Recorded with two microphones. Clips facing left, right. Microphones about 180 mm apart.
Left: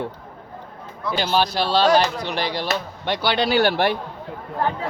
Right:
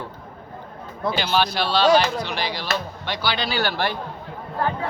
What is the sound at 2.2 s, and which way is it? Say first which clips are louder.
Speech: left 3 dB; 55° left (ahead or behind).